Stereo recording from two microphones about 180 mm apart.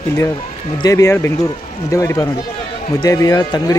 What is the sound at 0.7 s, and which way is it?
Speech, 20° left (ahead or behind).